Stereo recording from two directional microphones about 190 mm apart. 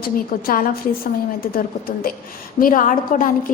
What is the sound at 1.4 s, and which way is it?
A woman's voice, 50° left (ahead or behind).